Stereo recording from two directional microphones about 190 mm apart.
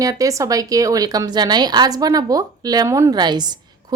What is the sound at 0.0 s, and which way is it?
Speech, 15° right (ahead or behind).